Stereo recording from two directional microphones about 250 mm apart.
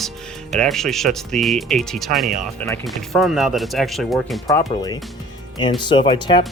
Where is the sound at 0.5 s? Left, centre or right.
Centre.